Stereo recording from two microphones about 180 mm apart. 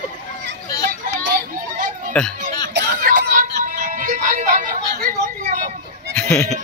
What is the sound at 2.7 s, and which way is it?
Music, 55° right (ahead or behind).